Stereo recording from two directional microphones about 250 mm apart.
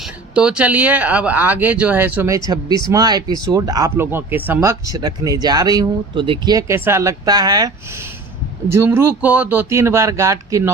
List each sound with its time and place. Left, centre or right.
0.0 s speech: centre